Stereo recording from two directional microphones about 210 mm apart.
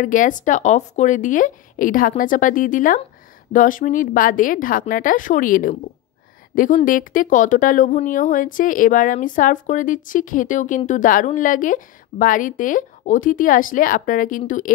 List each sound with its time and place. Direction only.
0.0 s speech: 40° left (ahead or behind)